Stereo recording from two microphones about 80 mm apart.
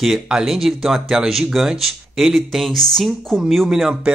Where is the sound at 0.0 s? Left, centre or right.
Centre.